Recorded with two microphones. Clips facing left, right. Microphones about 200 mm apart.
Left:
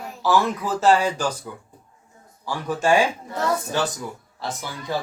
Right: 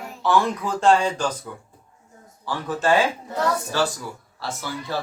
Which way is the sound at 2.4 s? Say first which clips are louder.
Left 1 dB; 10° left (ahead or behind).